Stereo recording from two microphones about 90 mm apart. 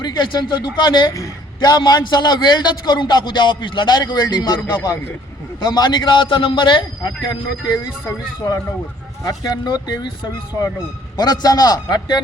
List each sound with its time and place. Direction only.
0.0 s a man's voice: 55° left (ahead or behind)
1.1 s a man's voice: 40° left (ahead or behind)
11.2 s a man's voice: 50° left (ahead or behind)